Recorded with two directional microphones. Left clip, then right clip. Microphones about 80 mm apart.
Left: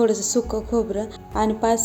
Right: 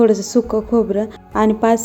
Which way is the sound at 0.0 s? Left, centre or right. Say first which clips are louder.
Right 6 dB; right.